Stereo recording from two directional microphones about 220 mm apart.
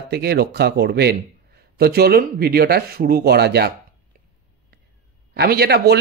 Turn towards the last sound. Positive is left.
turn(degrees=-45)  # may be behind; listen again after turning